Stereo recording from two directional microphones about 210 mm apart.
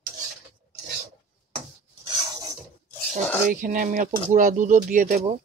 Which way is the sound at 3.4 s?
40° right (ahead or behind).